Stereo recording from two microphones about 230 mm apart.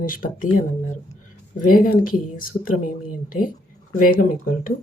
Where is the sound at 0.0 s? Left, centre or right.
Left.